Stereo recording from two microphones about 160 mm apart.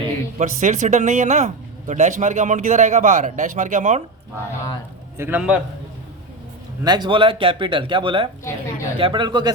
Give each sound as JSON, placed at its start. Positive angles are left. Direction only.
{"t": 0.3, "sound": "speech", "side_deg": -50}
{"t": 5.1, "sound": "a man's voice", "side_deg": -15}
{"t": 6.8, "sound": "speech", "side_deg": -25}